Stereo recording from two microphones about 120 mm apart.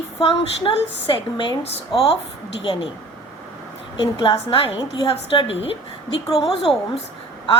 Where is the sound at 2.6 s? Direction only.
45° left (ahead or behind).